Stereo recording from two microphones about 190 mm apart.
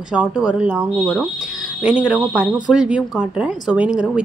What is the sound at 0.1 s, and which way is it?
A woman's voice, 5° right (ahead or behind).